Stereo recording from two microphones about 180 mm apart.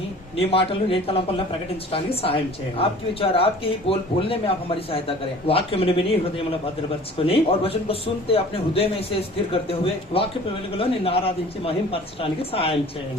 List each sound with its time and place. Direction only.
0.3 s a woman's voice: 30° left (ahead or behind)
7.2 s a woman's voice: 30° left (ahead or behind)